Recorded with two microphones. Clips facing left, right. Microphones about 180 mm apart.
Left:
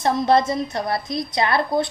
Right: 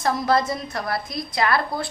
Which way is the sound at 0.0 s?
25° left (ahead or behind).